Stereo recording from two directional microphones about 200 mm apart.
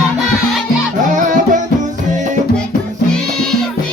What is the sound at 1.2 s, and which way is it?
Music, 40° right (ahead or behind).